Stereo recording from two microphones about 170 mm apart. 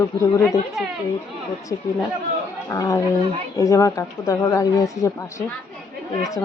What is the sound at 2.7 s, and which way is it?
Speech, 20° left (ahead or behind).